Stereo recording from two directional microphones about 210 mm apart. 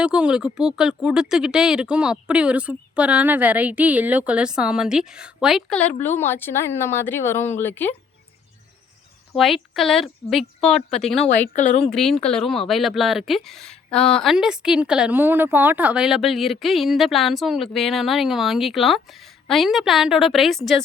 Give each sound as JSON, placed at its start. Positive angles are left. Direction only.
{"t": 0.0, "sound": "speech", "side_deg": -5}
{"t": 9.3, "sound": "speech", "side_deg": 0}
{"t": 11.5, "sound": "speech", "side_deg": 35}
{"t": 11.9, "sound": "speech", "side_deg": 0}